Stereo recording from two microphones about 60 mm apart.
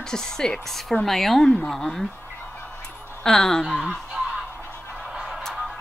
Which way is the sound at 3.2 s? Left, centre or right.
Centre.